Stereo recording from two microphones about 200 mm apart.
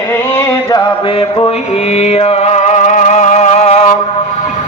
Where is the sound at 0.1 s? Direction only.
15° left (ahead or behind); by 3.9 s 35° left (ahead or behind).